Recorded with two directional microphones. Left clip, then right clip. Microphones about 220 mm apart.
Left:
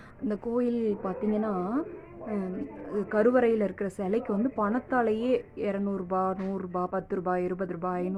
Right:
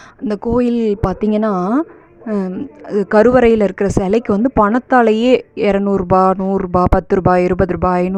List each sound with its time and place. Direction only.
0.3 s speech: 45° right (ahead or behind)
2.9 s speech: 45° right (ahead or behind)